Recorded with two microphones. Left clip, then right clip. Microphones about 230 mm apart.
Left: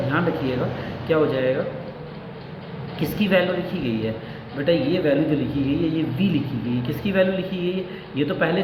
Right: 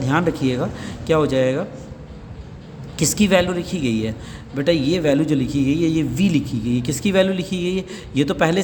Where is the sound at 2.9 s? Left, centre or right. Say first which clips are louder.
Right 3 dB; right.